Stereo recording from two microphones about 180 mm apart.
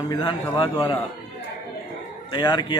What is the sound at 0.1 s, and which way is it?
Speech, 25° left (ahead or behind).